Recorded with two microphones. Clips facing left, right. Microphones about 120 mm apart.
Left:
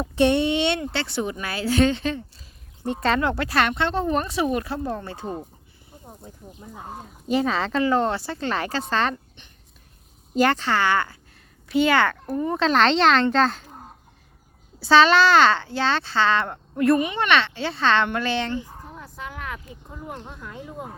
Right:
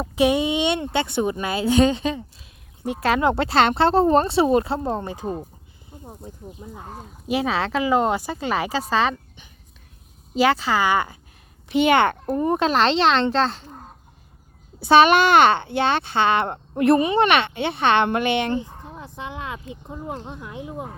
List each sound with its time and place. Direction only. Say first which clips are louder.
0.0 s speech: even; 10° right (ahead or behind)
2.1 s speech: even; 5° right (ahead or behind)
3.2 s speech: right 4 dB; 25° right (ahead or behind)
6.7 s speech: left 4 dB; 10° left (ahead or behind)
7.3 s speech: even; 5° right (ahead or behind)
10.3 s speech: right 1 dB; 5° right (ahead or behind)
12.7 s a child's voice: left 3 dB; centre (ahead or behind)
14.8 s speech: right 2 dB; 20° right (ahead or behind)